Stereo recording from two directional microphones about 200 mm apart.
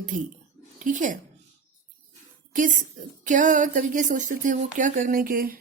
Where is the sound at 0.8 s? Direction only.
40° right (ahead or behind).